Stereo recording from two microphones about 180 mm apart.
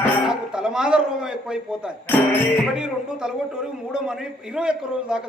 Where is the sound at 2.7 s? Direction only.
5° right (ahead or behind).